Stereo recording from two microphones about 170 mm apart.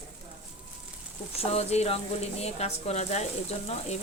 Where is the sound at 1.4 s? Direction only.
40° left (ahead or behind).